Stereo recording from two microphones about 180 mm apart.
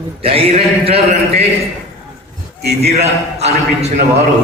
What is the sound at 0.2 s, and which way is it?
A man's voice, 30° right (ahead or behind).